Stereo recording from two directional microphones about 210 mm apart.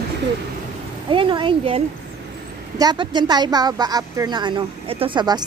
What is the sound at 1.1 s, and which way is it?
Speech, 25° right (ahead or behind).